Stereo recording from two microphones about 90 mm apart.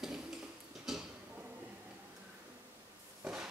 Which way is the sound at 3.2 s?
10° right (ahead or behind).